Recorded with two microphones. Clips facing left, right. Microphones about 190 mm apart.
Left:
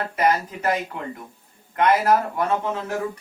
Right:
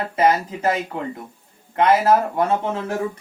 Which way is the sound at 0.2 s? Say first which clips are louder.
Right 3 dB; 25° right (ahead or behind).